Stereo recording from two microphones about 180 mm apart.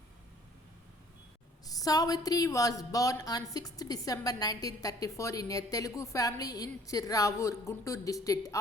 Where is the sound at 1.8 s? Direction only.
20° left (ahead or behind).